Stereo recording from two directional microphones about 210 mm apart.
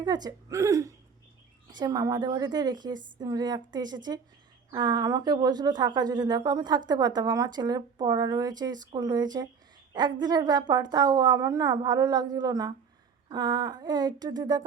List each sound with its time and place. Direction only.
0.0 s a woman's voice: 20° right (ahead or behind)